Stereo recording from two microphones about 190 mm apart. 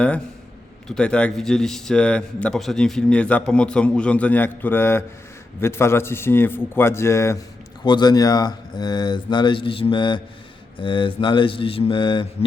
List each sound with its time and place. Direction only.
0.9 s a man's voice: 5° left (ahead or behind); by 12.5 s 25° left (ahead or behind)